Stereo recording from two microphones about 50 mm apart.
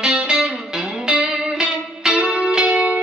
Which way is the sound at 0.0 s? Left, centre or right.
Centre.